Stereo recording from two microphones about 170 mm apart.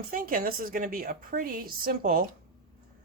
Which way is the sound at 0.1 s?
55° right (ahead or behind).